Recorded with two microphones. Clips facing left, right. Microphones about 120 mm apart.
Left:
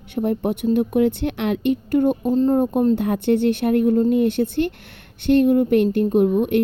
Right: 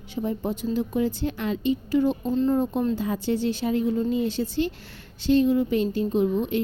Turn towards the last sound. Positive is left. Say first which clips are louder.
# left 6 dB
turn(degrees=60)  # may be behind; listen again after turning